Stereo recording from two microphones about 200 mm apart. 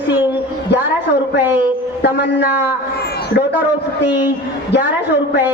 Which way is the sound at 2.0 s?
55° left (ahead or behind).